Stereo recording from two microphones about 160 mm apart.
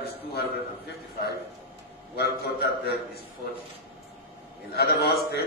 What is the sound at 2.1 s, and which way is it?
Speech, 90° left.